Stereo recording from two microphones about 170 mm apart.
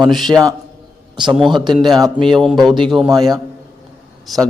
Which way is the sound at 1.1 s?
25° right (ahead or behind).